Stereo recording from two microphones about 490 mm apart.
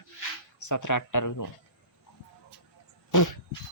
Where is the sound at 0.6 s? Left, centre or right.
Left.